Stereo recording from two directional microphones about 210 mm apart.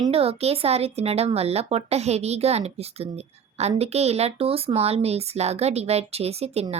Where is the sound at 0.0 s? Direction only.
30° right (ahead or behind).